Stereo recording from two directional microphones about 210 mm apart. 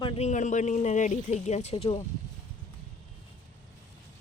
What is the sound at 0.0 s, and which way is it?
Speech, 30° left (ahead or behind).